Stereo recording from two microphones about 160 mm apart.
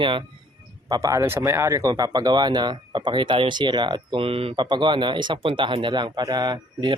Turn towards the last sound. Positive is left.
turn(degrees=-25)  # may be behind; listen again after turning